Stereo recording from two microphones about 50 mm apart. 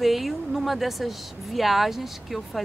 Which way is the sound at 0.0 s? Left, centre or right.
Centre.